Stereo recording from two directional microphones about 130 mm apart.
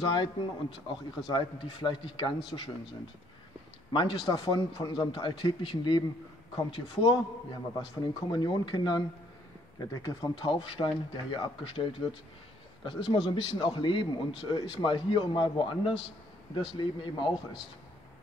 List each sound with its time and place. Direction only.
0.1 s speech: 40° left (ahead or behind)
3.9 s speech: 35° left (ahead or behind)